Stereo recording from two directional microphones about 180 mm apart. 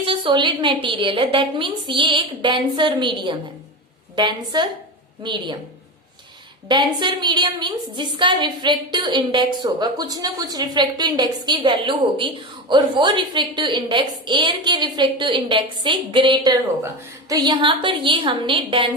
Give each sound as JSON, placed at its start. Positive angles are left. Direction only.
{"t": 0.0, "sound": "a woman's voice", "side_deg": -30}
{"t": 6.7, "sound": "a woman's voice", "side_deg": -25}